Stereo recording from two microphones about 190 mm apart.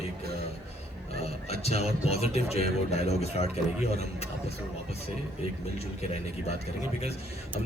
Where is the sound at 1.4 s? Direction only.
35° left (ahead or behind).